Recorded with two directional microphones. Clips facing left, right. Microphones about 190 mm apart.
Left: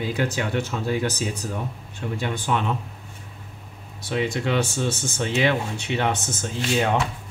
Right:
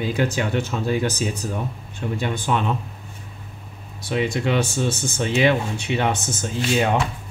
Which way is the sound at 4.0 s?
15° right (ahead or behind).